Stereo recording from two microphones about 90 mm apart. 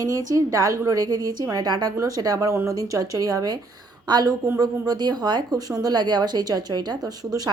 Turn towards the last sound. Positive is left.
turn(degrees=-50)  # may be behind; listen again after turning